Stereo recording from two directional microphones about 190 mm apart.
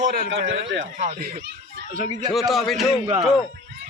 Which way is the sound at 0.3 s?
75° right (ahead or behind).